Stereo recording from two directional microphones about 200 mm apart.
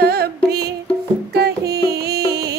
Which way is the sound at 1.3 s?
55° right (ahead or behind).